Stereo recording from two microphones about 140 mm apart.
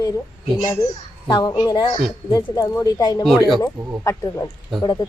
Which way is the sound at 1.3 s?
30° left (ahead or behind).